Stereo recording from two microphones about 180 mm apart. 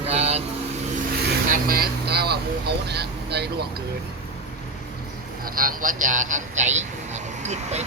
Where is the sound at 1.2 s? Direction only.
55° right (ahead or behind).